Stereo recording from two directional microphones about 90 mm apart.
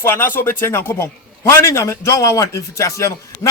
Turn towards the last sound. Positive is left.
turn(degrees=35)  # may be behind; listen again after turning